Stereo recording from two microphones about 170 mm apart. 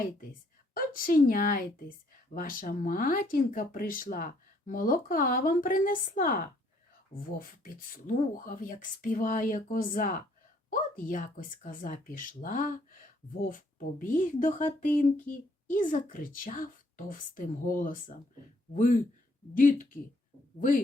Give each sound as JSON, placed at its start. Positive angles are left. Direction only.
{"t": 0.7, "sound": "a woman's voice", "side_deg": 55}